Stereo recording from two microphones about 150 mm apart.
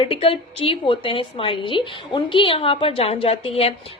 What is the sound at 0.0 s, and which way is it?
A woman's voice, 40° left (ahead or behind).